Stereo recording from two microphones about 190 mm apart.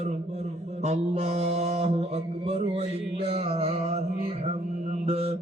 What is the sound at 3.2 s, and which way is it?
Music, 30° right (ahead or behind).